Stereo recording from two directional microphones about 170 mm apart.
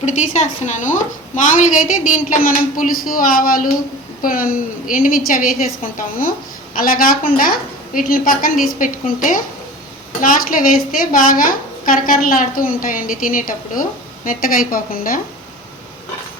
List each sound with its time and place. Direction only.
0.0 s a woman's voice: 45° left (ahead or behind)